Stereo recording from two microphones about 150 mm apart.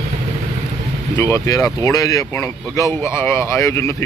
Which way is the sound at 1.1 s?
15° left (ahead or behind).